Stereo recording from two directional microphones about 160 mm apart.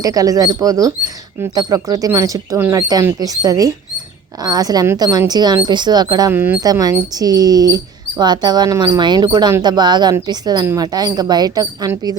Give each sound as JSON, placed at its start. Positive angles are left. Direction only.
{"t": 0.0, "sound": "speech", "side_deg": -20}
{"t": 6.3, "sound": "speech", "side_deg": -15}
{"t": 6.7, "sound": "speech", "side_deg": -25}